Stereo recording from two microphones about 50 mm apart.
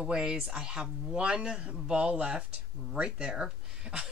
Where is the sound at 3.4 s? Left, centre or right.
Centre.